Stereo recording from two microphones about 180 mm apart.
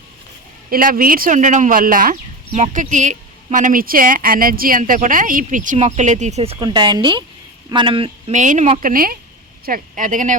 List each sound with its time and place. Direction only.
0.7 s speech: 50° right (ahead or behind)
2.5 s speech: 40° right (ahead or behind)
8.3 s speech: 45° right (ahead or behind)